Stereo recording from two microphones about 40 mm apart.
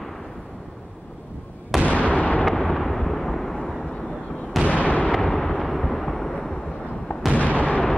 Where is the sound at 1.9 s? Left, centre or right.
Left.